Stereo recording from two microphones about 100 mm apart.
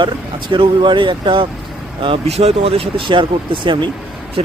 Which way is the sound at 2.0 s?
75° right (ahead or behind).